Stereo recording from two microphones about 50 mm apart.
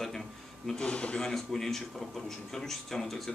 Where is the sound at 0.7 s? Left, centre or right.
Centre.